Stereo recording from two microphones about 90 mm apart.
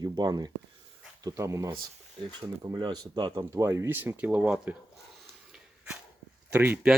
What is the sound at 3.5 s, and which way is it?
Speech, 30° right (ahead or behind).